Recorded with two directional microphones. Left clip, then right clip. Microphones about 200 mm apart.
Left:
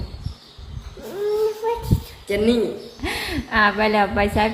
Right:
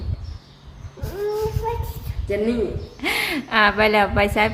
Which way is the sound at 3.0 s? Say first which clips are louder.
Right 5 dB; 15° right (ahead or behind).